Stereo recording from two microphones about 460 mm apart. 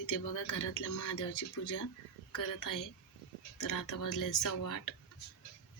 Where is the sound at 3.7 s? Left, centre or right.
Left.